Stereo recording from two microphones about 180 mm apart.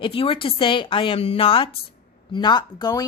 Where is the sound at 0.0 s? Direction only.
30° left (ahead or behind).